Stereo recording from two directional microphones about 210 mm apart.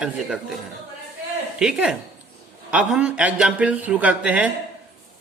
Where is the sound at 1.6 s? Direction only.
5° right (ahead or behind).